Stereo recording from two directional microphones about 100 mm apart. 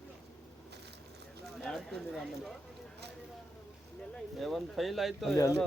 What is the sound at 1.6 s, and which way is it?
Speech, 5° left (ahead or behind).